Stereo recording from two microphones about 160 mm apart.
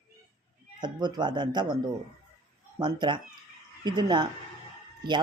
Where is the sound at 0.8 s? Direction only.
25° right (ahead or behind).